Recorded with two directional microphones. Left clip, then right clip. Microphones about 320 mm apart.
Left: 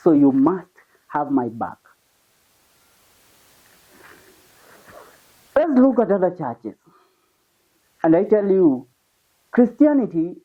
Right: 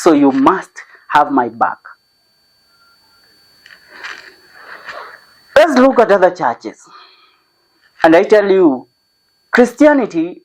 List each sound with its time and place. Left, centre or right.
0.0 s speech: centre
3.9 s a sound: centre
4.6 s wheeze: centre
5.5 s speech: centre